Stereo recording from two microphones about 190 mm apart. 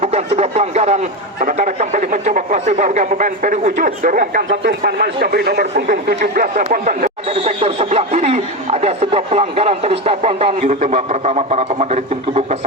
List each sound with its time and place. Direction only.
0.0 s speech: 35° right (ahead or behind)
7.3 s speech: 30° right (ahead or behind)